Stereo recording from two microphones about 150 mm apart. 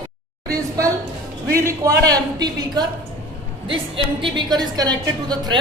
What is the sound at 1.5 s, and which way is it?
A man's voice, 20° right (ahead or behind).